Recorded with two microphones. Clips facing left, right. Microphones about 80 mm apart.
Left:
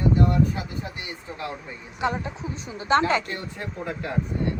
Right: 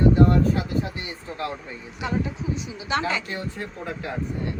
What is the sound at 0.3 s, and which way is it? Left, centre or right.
Speech, centre.